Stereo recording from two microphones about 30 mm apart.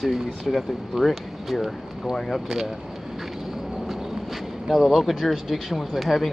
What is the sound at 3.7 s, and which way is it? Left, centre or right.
Speech, centre.